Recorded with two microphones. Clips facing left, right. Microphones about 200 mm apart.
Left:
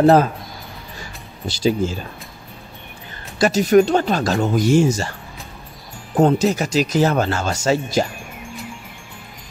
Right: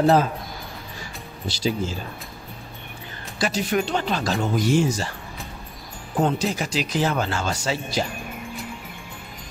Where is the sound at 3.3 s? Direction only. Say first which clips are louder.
Left 10 dB; 45° left (ahead or behind).